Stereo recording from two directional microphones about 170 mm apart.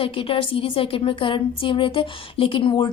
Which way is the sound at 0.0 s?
30° left (ahead or behind).